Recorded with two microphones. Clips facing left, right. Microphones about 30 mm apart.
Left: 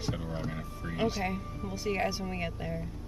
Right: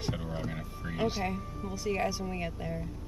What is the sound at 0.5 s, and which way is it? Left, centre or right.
Speech, centre.